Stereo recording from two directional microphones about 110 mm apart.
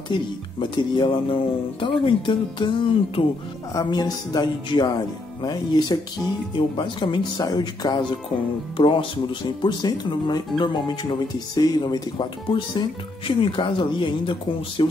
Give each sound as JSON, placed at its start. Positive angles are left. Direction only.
{"t": 0.1, "sound": "speech", "side_deg": 45}